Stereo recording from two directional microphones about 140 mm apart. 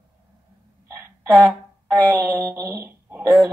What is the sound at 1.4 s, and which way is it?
Speech, 20° right (ahead or behind).